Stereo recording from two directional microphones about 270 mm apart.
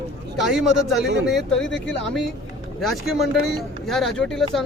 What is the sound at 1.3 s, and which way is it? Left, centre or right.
Speech, centre.